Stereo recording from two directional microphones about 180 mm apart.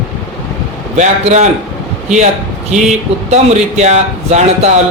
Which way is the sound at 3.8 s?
40° right (ahead or behind).